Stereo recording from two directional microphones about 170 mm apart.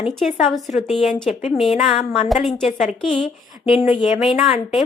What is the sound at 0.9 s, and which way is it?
Speech, centre (ahead or behind).